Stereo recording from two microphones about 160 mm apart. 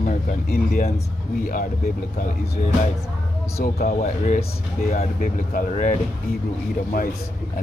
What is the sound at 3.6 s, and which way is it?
Speech, 60° left (ahead or behind).